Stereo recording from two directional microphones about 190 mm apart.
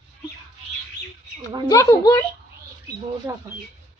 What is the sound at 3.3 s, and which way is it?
Speech, 15° right (ahead or behind).